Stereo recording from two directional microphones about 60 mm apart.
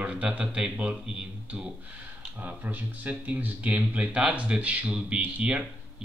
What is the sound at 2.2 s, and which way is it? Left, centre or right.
Speech, right.